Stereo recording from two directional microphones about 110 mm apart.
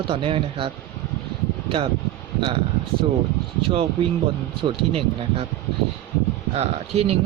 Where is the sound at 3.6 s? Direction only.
55° right (ahead or behind).